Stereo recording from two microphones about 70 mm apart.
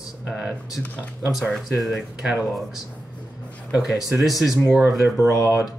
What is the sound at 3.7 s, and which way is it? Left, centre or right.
Speech, centre.